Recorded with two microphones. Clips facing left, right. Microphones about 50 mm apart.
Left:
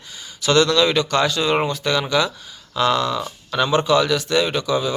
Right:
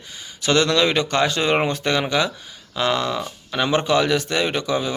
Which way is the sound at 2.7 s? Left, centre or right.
Centre.